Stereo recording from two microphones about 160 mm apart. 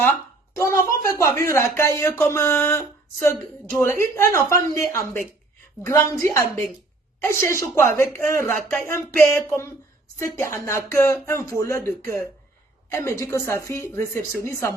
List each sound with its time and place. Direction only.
0.5 s a woman's voice: 15° left (ahead or behind)
5.8 s a woman's voice: 20° left (ahead or behind)